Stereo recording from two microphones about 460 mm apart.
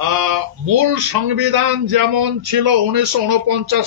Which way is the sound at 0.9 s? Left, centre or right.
Right.